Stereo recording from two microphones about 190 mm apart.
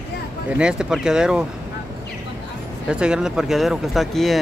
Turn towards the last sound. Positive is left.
turn(degrees=0)  # may be behind; listen again after turning